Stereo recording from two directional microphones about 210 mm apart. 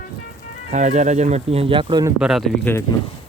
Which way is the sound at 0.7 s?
35° right (ahead or behind).